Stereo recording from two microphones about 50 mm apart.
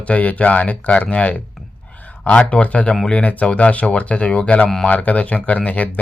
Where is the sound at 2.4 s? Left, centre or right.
Left.